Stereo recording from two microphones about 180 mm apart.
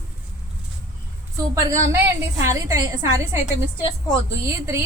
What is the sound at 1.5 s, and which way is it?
A woman's voice, 15° right (ahead or behind).